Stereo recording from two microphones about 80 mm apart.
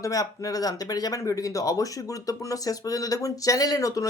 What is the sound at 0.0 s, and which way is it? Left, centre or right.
Speech, left.